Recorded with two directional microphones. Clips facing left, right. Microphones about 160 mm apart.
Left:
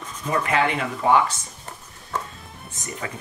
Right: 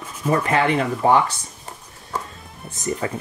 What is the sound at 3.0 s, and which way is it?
Speech, 35° right (ahead or behind).